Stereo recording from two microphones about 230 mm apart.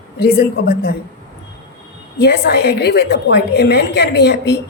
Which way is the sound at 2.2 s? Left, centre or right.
Left.